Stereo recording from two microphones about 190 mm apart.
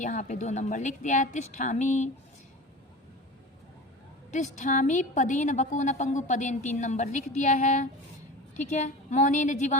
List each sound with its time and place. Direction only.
0.0 s a woman's voice: 40° left (ahead or behind)
4.3 s a woman's voice: 40° left (ahead or behind)